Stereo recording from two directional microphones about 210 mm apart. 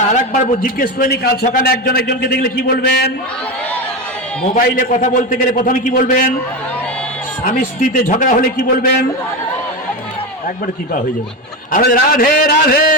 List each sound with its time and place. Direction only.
0.6 s a man's voice: 45° left (ahead or behind)
4.5 s a man's voice: 40° left (ahead or behind)
7.4 s a man's voice: 40° left (ahead or behind)
11.7 s a man's voice: 45° left (ahead or behind)